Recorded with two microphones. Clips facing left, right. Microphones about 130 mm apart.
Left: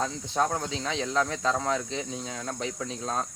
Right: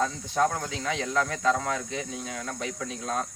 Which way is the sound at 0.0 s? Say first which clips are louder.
Right 2 dB; 25° left (ahead or behind).